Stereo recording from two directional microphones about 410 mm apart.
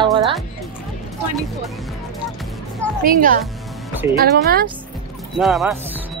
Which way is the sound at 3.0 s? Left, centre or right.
Centre.